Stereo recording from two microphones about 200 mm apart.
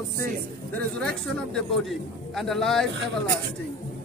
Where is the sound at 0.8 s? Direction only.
5° left (ahead or behind).